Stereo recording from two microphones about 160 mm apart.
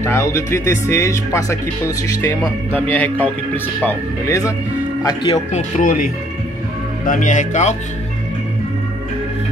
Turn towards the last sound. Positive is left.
turn(degrees=50)  # may be behind; listen again after turning